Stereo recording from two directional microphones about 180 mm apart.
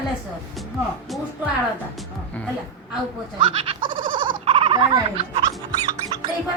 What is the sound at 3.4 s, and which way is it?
Goat, 30° right (ahead or behind).